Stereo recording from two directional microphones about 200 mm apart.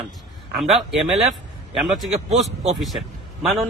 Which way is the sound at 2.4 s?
35° right (ahead or behind).